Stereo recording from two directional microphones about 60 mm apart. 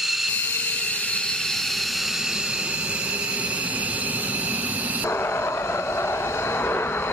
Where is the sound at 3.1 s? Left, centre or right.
Right.